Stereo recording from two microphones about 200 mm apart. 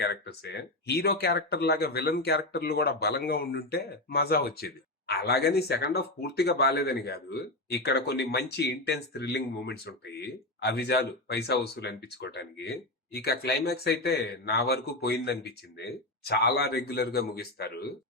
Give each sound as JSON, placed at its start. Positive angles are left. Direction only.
{"t": 0.0, "sound": "speech", "side_deg": 55}